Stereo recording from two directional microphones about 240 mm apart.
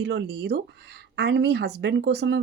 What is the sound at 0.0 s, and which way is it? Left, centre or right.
Speech, right.